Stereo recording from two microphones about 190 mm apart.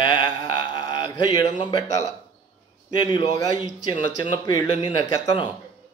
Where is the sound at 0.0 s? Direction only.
25° left (ahead or behind).